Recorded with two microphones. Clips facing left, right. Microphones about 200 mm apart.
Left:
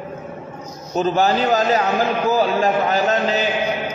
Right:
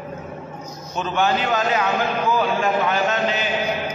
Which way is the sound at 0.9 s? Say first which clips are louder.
Left 4 dB; 35° left (ahead or behind).